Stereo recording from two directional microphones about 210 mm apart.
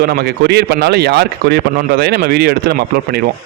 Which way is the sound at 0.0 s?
50° right (ahead or behind).